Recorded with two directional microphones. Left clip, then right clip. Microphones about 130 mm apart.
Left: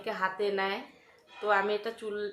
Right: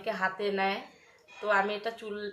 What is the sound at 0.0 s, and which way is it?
Speech, 20° left (ahead or behind).